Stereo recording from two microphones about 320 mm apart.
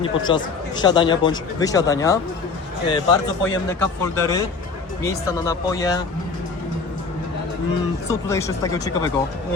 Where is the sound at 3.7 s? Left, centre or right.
Centre.